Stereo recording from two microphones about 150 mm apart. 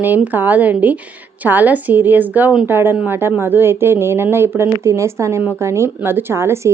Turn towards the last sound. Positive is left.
turn(degrees=-20)  # may be behind; listen again after turning